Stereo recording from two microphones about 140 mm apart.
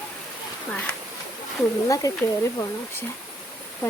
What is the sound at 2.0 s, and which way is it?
Speech, 25° left (ahead or behind).